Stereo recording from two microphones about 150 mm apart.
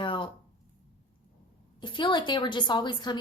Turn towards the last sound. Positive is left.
turn(degrees=30)  # may be behind; listen again after turning